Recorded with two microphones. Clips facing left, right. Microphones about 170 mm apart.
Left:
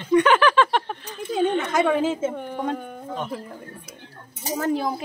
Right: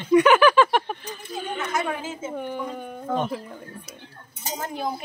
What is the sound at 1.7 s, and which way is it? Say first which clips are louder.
Speech: left 8 dB; 90° left.